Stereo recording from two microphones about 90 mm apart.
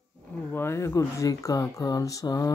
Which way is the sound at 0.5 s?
25° left (ahead or behind).